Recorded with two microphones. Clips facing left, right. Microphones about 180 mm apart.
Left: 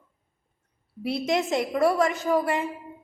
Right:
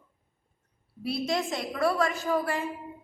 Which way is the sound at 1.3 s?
20° left (ahead or behind).